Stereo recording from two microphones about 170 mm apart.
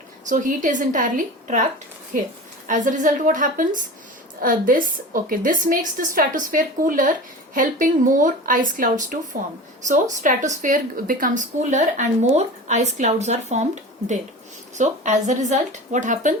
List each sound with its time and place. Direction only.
0.3 s speech: 50° right (ahead or behind)
2.6 s speech: 50° right (ahead or behind)
14.8 s speech: 45° right (ahead or behind)